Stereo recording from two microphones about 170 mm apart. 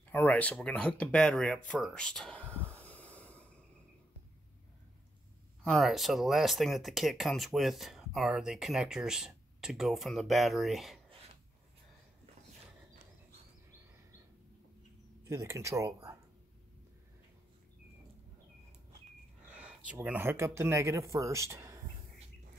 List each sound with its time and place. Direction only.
0.1 s speech: 10° left (ahead or behind)
2.8 s snort: 10° left (ahead or behind)
5.6 s speech: centre (ahead or behind)
15.2 s speech: 15° right (ahead or behind)
19.4 s speech: 5° right (ahead or behind)